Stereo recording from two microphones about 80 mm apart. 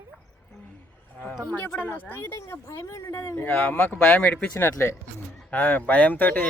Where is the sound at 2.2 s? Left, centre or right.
Left; by 4.5 s centre.